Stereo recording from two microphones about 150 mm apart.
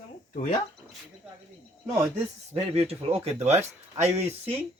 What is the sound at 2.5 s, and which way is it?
Speech, 40° right (ahead or behind).